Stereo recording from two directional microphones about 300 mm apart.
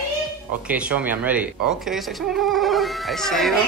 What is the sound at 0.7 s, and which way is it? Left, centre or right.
Speech, centre.